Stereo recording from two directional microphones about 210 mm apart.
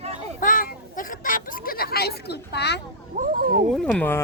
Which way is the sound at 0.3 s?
40° left (ahead or behind).